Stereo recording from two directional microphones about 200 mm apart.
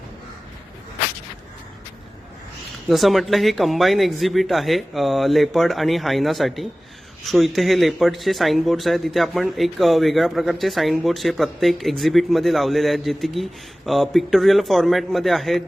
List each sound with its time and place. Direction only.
2.9 s speech: centre (ahead or behind)